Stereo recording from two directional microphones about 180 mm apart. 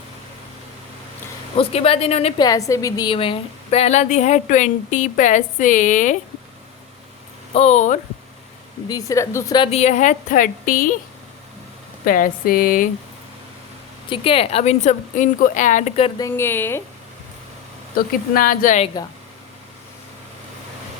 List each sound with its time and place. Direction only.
1.5 s a woman's voice: 35° left (ahead or behind)
2.4 s a woman's voice: 20° left (ahead or behind); by 6.1 s 45° left (ahead or behind)
7.5 s a woman's voice: 35° left (ahead or behind)
8.9 s a woman's voice: 20° left (ahead or behind)
9.7 s a woman's voice: 40° left (ahead or behind)
12.0 s a woman's voice: 50° left (ahead or behind)
14.1 s a woman's voice: 30° left (ahead or behind)
16.1 s speech: 15° left (ahead or behind)
17.9 s a woman's voice: 50° left (ahead or behind)